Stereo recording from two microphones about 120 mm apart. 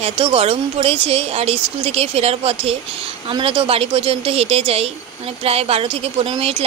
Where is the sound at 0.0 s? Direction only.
55° right (ahead or behind).